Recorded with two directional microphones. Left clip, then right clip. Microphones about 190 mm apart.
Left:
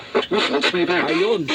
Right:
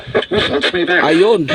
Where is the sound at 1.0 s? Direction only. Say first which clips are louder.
Right 8 dB; 60° right (ahead or behind).